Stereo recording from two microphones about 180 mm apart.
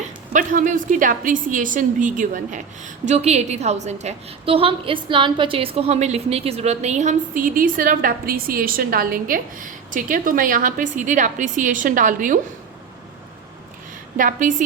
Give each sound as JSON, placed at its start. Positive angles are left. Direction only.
{"t": 0.3, "sound": "a woman's voice", "side_deg": -45}
{"t": 14.2, "sound": "a woman's voice", "side_deg": -45}